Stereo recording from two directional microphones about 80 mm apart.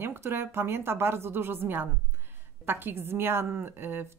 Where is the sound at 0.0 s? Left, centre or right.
Right.